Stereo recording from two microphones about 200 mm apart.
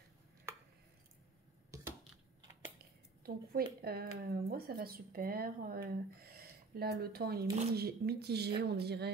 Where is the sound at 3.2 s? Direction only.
50° right (ahead or behind).